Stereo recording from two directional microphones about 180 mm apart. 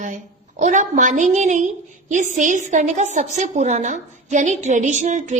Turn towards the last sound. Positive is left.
turn(degrees=-40)  # may be behind; listen again after turning